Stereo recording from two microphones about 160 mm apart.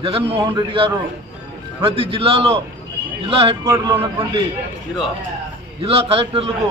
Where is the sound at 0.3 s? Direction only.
30° right (ahead or behind).